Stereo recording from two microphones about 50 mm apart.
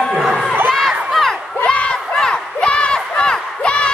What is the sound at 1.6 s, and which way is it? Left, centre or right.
Crowd, left.